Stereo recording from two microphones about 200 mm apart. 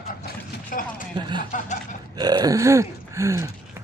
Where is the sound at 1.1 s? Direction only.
25° right (ahead or behind).